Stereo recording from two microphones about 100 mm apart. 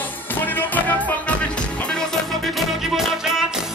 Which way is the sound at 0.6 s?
20° left (ahead or behind).